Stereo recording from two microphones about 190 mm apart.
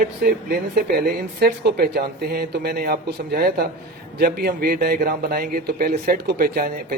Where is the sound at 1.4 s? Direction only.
60° right (ahead or behind).